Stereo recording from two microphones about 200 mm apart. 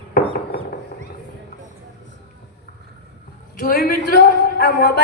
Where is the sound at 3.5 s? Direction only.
50° left (ahead or behind).